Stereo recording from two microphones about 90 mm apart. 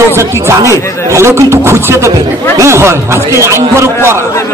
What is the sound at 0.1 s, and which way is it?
Speech, 30° right (ahead or behind).